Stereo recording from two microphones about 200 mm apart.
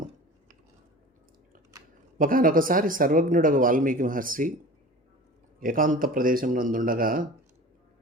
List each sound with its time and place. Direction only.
2.1 s speech: 45° right (ahead or behind)
5.5 s speech: 45° right (ahead or behind)